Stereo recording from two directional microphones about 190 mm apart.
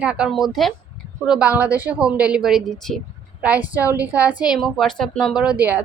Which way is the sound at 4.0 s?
10° right (ahead or behind).